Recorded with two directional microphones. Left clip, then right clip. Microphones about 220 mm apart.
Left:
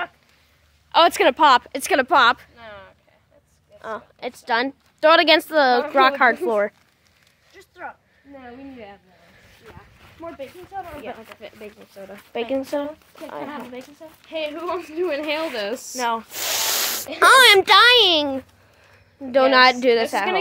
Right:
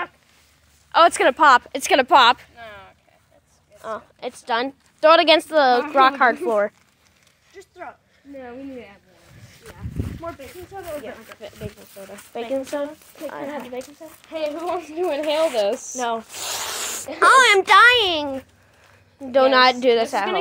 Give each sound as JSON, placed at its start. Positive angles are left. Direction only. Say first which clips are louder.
{"t": 0.9, "sound": "a woman's voice", "louder": "even", "side_deg": 10}
{"t": 1.8, "sound": "speech", "louder": "right 2 dB", "side_deg": -5}
{"t": 2.5, "sound": "a sound", "louder": "right 1 dB", "side_deg": 15}
{"t": 3.8, "sound": "a woman's voice", "louder": "even", "side_deg": 10}
{"t": 7.5, "sound": "a sound", "louder": "left 1 dB", "side_deg": 10}
{"t": 12.3, "sound": "a woman's voice", "louder": "left 1 dB", "side_deg": 20}
{"t": 15.7, "sound": "speech", "louder": "even", "side_deg": 55}
{"t": 16.3, "sound": "a child's voice", "louder": "left 5 dB", "side_deg": 35}
{"t": 19.2, "sound": "a woman's voice", "louder": "even", "side_deg": 5}